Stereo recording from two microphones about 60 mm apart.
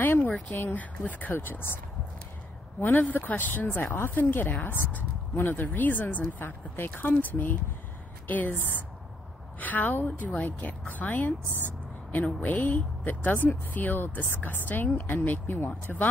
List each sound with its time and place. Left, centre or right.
0.0 s a sound: left
0.6 s a woman's voice: left
2.8 s a woman's voice: left
9.6 s a woman's voice: left
11.4 s speech: right
12.4 s a woman's voice: left